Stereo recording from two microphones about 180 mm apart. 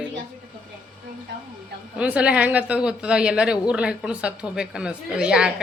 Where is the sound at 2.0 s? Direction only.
5° right (ahead or behind).